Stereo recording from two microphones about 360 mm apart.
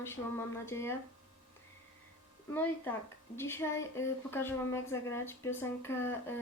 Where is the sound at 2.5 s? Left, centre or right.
Centre.